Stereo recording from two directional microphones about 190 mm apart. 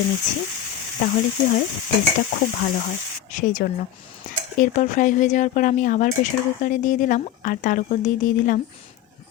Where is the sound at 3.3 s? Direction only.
40° left (ahead or behind).